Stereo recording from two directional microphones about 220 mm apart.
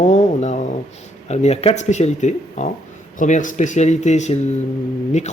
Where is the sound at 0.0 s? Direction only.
35° left (ahead or behind).